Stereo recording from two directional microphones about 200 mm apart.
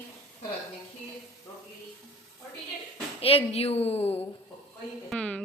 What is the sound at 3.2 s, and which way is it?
A woman's voice, 30° left (ahead or behind).